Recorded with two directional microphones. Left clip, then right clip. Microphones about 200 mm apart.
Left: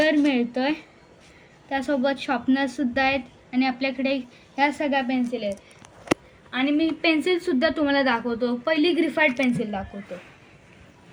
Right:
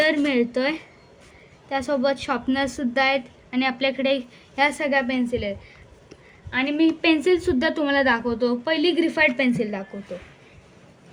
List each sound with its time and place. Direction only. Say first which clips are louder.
0.0 s a sound: right 1 dB; 40° right (ahead or behind)
1.7 s a woman's voice: right 1 dB; 30° right (ahead or behind)
6.5 s a woman's voice: right 2 dB; 20° right (ahead or behind)